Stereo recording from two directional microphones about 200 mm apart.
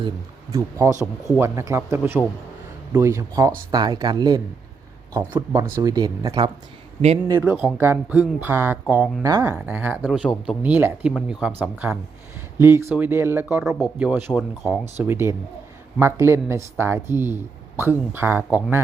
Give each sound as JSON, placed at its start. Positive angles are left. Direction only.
{"t": 0.5, "sound": "speech", "side_deg": -15}
{"t": 5.7, "sound": "speech", "side_deg": -20}